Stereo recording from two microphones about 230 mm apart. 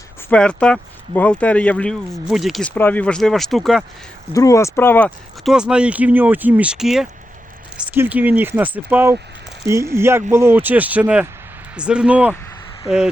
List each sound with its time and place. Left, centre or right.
0.3 s speech: centre
4.3 s speech: centre